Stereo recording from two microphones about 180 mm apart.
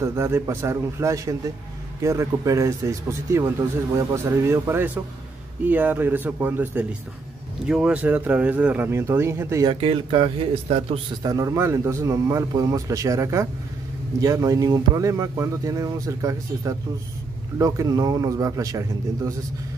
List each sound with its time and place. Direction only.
0.0 s speech: 15° right (ahead or behind)
9.7 s speech: 30° right (ahead or behind)
11.2 s speech: 20° right (ahead or behind)